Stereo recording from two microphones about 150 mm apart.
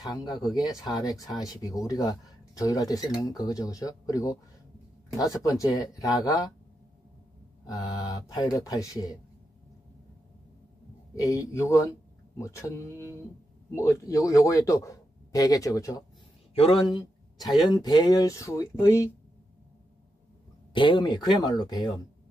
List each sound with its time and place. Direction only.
0.0 s speech: 25° left (ahead or behind)
7.6 s speech: 25° left (ahead or behind)
11.2 s speech: 20° left (ahead or behind)
16.5 s speech: 40° left (ahead or behind); by 19.0 s 25° left (ahead or behind)
20.7 s speech: 30° left (ahead or behind)